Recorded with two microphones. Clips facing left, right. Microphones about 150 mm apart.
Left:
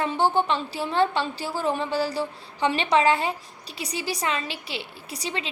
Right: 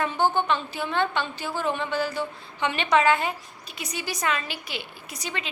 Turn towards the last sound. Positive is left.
turn(degrees=30)  # may be behind; listen again after turning